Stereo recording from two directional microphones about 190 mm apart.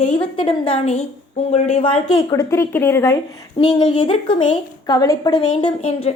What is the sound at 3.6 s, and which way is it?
A woman's voice, 25° left (ahead or behind).